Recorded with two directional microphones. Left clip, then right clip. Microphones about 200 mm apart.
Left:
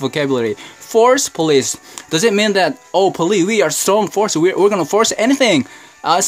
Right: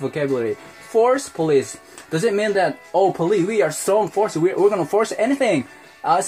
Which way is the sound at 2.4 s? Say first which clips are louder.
Left 4 dB; 60° left (ahead or behind).